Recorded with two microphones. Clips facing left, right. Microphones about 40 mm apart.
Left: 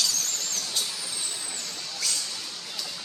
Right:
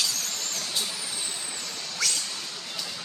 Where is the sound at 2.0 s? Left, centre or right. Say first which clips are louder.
Right 3 dB; right.